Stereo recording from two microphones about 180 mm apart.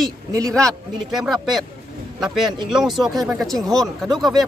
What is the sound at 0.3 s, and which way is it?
Speech, 20° right (ahead or behind).